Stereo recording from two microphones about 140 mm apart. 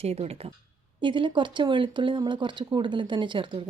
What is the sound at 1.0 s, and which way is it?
A woman's voice, 35° right (ahead or behind).